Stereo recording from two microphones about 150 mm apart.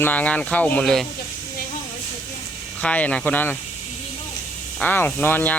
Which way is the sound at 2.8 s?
10° left (ahead or behind).